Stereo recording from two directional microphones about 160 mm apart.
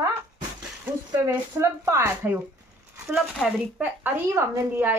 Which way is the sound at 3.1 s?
5° right (ahead or behind).